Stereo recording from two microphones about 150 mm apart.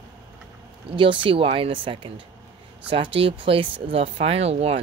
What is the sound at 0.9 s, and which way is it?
Speech, 35° right (ahead or behind).